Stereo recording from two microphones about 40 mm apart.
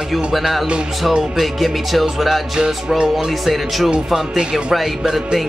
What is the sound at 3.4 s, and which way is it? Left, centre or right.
Speech, centre.